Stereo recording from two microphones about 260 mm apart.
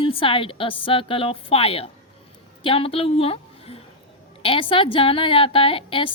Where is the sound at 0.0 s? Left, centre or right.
Left.